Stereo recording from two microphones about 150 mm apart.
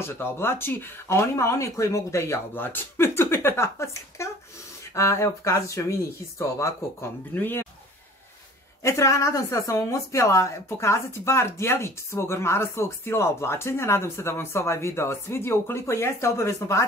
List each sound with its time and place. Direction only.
0.0 s a woman's voice: 15° left (ahead or behind)
8.8 s a woman's voice: 20° left (ahead or behind)